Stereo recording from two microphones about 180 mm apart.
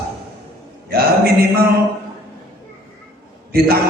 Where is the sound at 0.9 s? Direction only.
60° right (ahead or behind).